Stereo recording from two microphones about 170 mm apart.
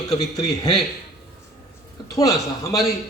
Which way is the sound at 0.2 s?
20° left (ahead or behind).